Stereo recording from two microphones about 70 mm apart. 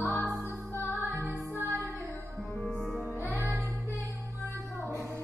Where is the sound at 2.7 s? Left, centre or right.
Centre.